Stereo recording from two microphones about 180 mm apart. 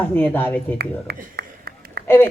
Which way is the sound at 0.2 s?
10° left (ahead or behind).